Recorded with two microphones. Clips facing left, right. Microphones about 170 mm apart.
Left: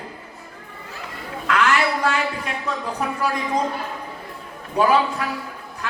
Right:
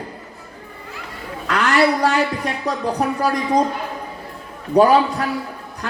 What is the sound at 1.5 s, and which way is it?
Speech, 35° right (ahead or behind).